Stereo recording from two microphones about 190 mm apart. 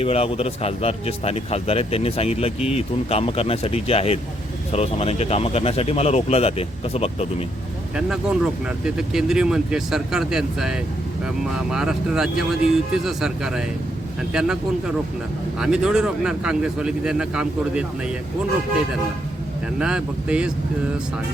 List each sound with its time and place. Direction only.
0.0 s speech: 30° left (ahead or behind)
7.9 s speech: 5° right (ahead or behind)
19.8 s speech: 5° right (ahead or behind)